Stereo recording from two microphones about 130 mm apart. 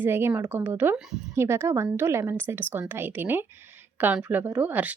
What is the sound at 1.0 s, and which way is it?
Speech, 5° right (ahead or behind).